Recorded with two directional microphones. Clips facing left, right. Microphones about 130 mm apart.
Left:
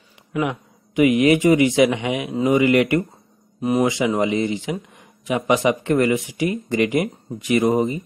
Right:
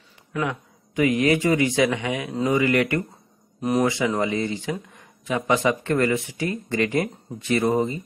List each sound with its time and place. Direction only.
0.3 s a man's voice: 15° left (ahead or behind)